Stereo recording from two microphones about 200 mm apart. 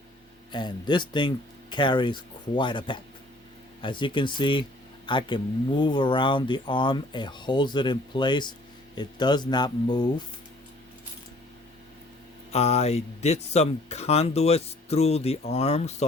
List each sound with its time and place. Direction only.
0.5 s speech: 20° left (ahead or behind)
12.5 s speech: 35° left (ahead or behind)